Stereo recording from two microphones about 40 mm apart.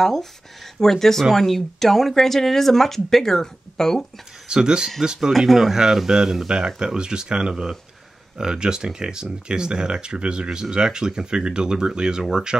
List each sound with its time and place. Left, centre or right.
0.0 s speech: centre
4.5 s speech: centre
5.5 s speech: centre